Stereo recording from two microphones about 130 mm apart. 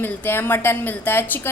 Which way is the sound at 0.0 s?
15° left (ahead or behind).